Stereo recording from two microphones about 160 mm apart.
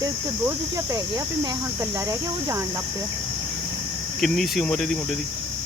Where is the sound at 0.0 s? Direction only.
20° right (ahead or behind).